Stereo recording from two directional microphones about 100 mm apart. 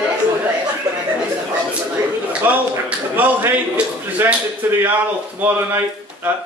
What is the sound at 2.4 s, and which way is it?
A man's voice, 20° right (ahead or behind).